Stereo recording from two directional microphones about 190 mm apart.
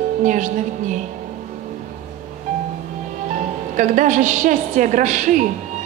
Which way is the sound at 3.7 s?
40° right (ahead or behind).